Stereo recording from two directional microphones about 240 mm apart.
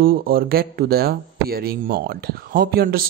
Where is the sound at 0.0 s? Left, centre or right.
Right.